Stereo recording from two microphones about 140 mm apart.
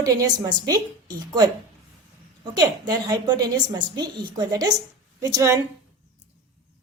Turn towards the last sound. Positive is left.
turn(degrees=-25)  # may be behind; listen again after turning